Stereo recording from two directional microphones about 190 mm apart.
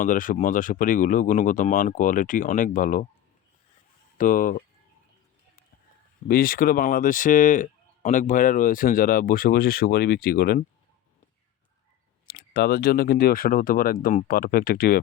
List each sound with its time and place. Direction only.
0.0 s speech: 45° left (ahead or behind)
4.2 s speech: 45° left (ahead or behind)
6.2 s speech: 50° left (ahead or behind)
12.3 s speech: 55° left (ahead or behind)